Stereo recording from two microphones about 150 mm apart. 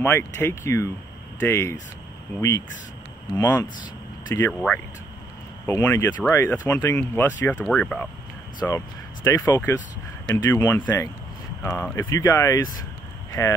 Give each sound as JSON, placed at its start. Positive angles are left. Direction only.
{"t": 0.0, "sound": "speech", "side_deg": 15}
{"t": 4.5, "sound": "speech", "side_deg": 10}
{"t": 5.7, "sound": "speech", "side_deg": 20}
{"t": 8.5, "sound": "speech", "side_deg": 25}